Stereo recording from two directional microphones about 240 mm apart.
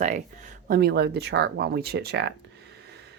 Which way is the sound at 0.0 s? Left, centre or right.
Right.